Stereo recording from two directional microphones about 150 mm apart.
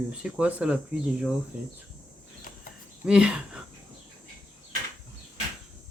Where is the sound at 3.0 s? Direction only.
5° right (ahead or behind).